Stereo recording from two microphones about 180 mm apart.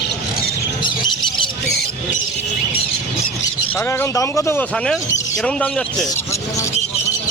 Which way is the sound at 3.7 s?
15° left (ahead or behind).